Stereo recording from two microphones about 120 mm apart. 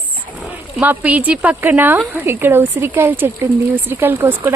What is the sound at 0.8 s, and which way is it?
Speech, 15° right (ahead or behind).